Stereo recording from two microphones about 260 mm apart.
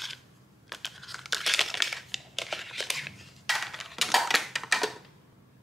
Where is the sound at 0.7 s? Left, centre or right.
Centre.